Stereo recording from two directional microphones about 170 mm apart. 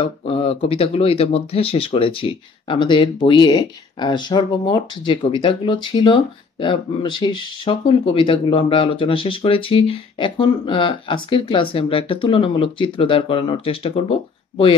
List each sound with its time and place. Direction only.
0.0 s speech: 30° left (ahead or behind)